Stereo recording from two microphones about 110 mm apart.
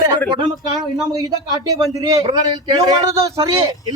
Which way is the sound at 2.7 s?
35° right (ahead or behind).